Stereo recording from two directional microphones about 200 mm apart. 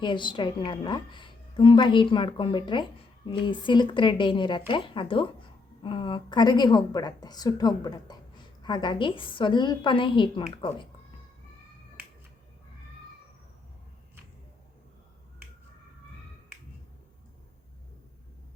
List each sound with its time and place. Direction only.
0.0 s a woman's voice: 25° left (ahead or behind)